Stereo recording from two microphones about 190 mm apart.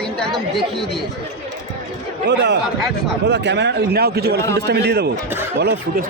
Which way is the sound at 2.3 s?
65° right (ahead or behind).